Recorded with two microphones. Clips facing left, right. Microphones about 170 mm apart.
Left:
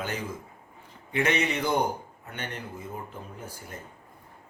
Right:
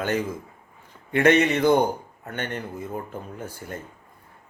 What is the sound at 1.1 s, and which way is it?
Speech, 60° right (ahead or behind).